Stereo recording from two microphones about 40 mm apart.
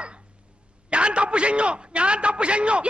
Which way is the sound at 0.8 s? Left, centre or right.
Right.